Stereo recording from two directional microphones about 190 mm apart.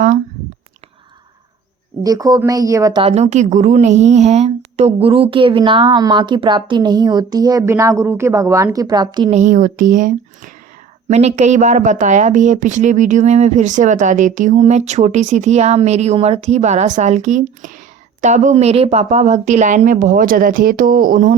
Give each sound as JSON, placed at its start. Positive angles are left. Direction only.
{"t": 2.0, "sound": "speech", "side_deg": -20}
{"t": 3.0, "sound": "a woman's voice", "side_deg": -30}
{"t": 9.3, "sound": "speech", "side_deg": -40}